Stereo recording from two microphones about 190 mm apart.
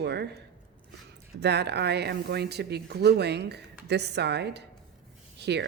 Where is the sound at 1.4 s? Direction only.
60° right (ahead or behind).